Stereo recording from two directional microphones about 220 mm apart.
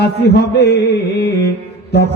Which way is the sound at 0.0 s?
50° left (ahead or behind).